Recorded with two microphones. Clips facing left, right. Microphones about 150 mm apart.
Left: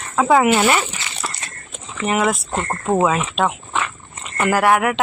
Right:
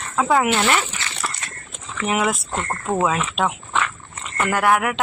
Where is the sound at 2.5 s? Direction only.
15° left (ahead or behind).